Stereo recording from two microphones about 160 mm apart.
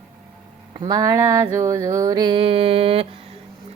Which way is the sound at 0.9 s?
20° right (ahead or behind).